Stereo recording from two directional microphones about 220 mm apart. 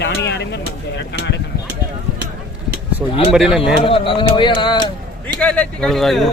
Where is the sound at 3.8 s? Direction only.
25° left (ahead or behind).